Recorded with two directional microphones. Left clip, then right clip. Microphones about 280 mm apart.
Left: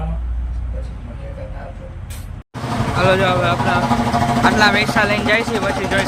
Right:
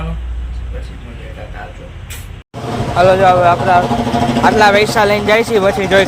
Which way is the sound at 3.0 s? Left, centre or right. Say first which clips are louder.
Right 7 dB; centre.